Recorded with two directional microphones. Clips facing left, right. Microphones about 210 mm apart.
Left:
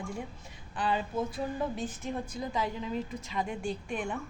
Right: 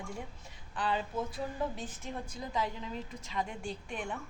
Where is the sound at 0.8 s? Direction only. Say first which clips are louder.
Left 2 dB; 10° left (ahead or behind).